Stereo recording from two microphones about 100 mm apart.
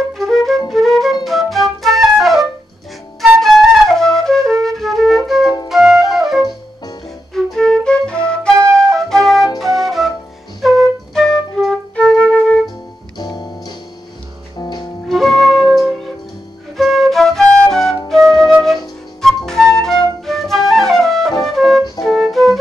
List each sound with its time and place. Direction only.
0.2 s music: centre (ahead or behind)
1.2 s flute: centre (ahead or behind)
13.2 s music: 45° left (ahead or behind)
15.0 s flute: 5° left (ahead or behind)